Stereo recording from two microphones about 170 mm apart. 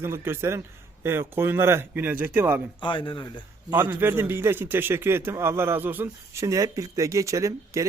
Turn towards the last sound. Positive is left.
turn(degrees=-20)  # may be behind; listen again after turning